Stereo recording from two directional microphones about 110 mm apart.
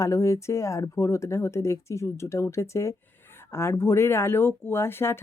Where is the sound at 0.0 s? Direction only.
25° left (ahead or behind).